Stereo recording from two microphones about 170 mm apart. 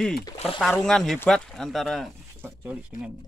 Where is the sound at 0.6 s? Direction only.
5° left (ahead or behind).